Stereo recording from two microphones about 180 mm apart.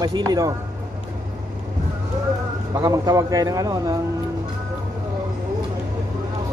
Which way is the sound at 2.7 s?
20° right (ahead or behind).